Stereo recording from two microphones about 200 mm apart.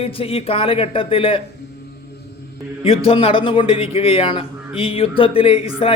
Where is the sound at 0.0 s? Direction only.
30° left (ahead or behind).